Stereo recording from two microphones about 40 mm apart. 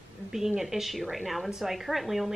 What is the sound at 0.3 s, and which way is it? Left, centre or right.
A woman's voice, centre.